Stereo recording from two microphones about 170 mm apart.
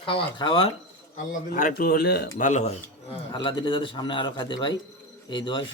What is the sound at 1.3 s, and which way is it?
Speech, 55° left (ahead or behind).